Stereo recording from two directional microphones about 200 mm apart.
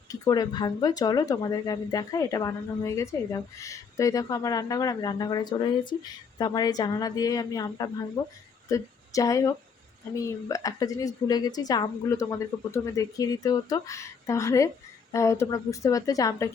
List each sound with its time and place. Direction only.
0.1 s a woman's voice: 20° left (ahead or behind)